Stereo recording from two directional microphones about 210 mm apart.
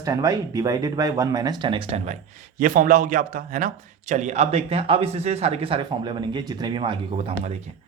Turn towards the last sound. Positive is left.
turn(degrees=-25)  # may be behind; listen again after turning